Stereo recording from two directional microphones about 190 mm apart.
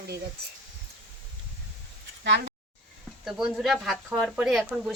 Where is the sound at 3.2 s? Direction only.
Centre (ahead or behind).